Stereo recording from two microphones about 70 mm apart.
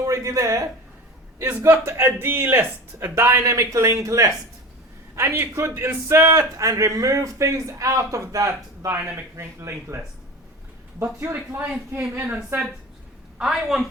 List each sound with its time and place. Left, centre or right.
0.0 s speech: right
1.4 s a man's voice: right
3.4 s a man's voice: right
5.1 s a man's voice: right
6.6 s a man's voice: right
11.0 s a man's voice: right
13.4 s a woman's voice: centre